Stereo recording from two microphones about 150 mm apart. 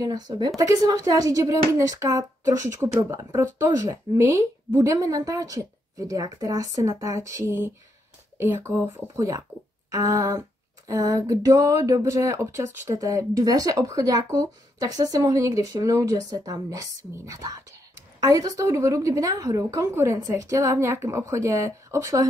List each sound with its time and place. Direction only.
0.0 s a woman's voice: 25° right (ahead or behind)